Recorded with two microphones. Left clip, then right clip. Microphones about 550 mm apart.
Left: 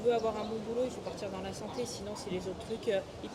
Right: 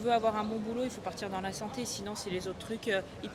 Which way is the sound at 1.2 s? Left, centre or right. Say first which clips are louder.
Right 3 dB; right.